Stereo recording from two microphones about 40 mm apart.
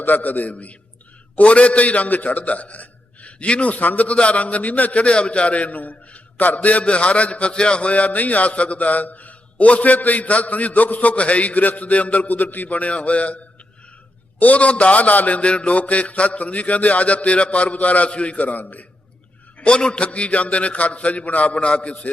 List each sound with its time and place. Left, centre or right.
0.0 s a man's voice: left
15.4 s a man's voice: left
19.6 s a man's voice: left